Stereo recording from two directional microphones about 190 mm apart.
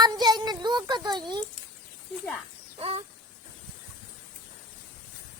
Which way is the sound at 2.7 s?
30° right (ahead or behind).